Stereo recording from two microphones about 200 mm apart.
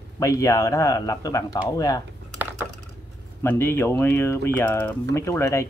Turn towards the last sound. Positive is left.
turn(degrees=15)  # may be behind; listen again after turning